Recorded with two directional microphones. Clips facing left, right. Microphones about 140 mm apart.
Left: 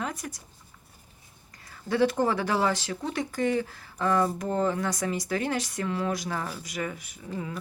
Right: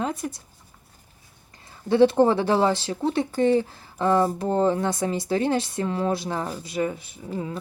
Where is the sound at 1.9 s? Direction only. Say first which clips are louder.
Right 7 dB; 25° right (ahead or behind).